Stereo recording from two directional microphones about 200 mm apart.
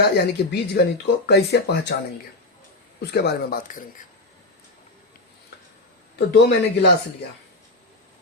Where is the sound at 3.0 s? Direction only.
55° left (ahead or behind).